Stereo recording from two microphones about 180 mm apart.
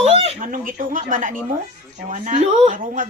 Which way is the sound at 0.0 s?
35° right (ahead or behind).